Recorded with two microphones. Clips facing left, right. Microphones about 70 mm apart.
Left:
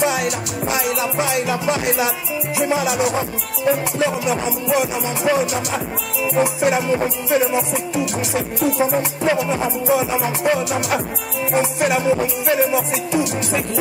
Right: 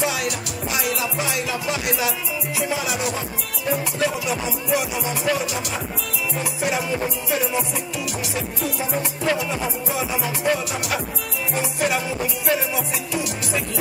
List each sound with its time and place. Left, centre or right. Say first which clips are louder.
0.0 s music: left 5 dB; left